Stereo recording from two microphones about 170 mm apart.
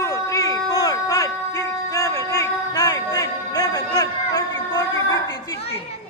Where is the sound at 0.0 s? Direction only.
20° left (ahead or behind).